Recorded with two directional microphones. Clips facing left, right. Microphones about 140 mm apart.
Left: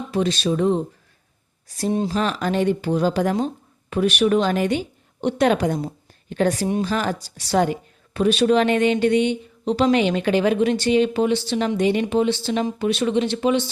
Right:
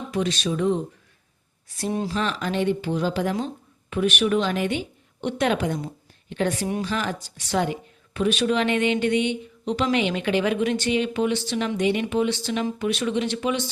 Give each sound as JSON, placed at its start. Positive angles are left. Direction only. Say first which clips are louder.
{"t": 0.1, "sound": "a woman's voice", "louder": "left 4 dB", "side_deg": 35}
{"t": 2.0, "sound": "a woman's voice", "louder": "left 4 dB", "side_deg": 40}